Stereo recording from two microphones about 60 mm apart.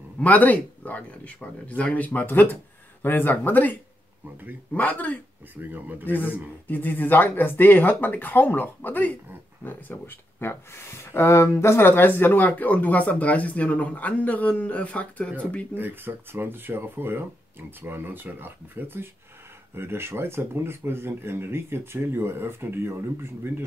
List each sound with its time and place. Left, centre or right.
0.2 s speech: left
4.7 s speech: left
5.6 s speech: right
6.0 s speech: left
11.9 s speech: left
15.7 s speech: right